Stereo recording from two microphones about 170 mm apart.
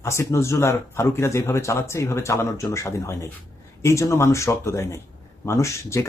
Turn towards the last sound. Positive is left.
turn(degrees=15)  # may be behind; listen again after turning